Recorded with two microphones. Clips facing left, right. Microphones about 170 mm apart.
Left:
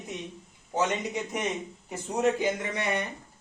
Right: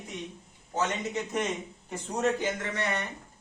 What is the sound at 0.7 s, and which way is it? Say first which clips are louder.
Speech: left 2 dB; 10° left (ahead or behind).